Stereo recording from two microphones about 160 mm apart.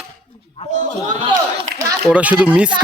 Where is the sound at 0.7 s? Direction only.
50° right (ahead or behind).